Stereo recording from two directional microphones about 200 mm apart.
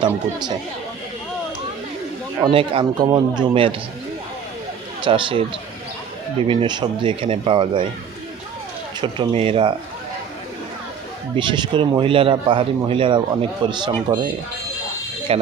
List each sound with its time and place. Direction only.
2.4 s speech: 25° right (ahead or behind)
5.0 s speech: 25° right (ahead or behind)
6.5 s speech: 25° right (ahead or behind)
9.0 s speech: 25° right (ahead or behind)
11.3 s speech: 25° right (ahead or behind)
15.3 s speech: 30° right (ahead or behind)